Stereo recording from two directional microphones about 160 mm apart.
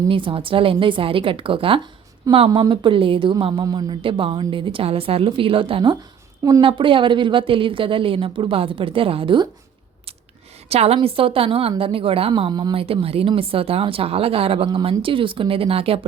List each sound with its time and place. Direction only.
0.1 s a woman's voice: 35° right (ahead or behind)
10.7 s a woman's voice: 40° right (ahead or behind)